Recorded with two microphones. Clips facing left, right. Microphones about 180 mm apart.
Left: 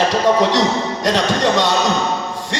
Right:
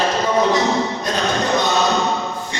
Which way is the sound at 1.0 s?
85° left.